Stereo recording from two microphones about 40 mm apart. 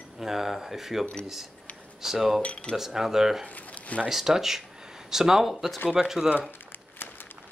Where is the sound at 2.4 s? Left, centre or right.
Left.